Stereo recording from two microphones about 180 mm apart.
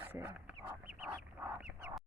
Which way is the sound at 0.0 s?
10° right (ahead or behind).